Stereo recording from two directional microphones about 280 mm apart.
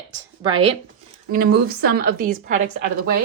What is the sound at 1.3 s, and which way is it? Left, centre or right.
A woman's voice, right.